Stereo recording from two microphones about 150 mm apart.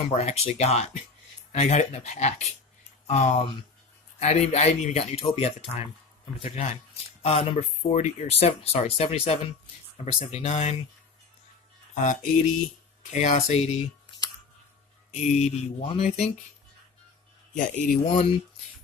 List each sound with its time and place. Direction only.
0.1 s speech: 45° left (ahead or behind)
11.9 s speech: 55° left (ahead or behind)
17.5 s speech: 55° left (ahead or behind)